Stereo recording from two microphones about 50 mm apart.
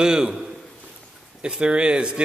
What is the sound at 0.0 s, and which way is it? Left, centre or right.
Speech, centre.